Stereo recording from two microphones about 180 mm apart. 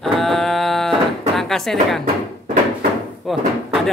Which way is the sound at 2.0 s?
40° right (ahead or behind).